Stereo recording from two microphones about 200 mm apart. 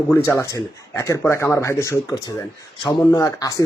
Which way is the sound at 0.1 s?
15° left (ahead or behind).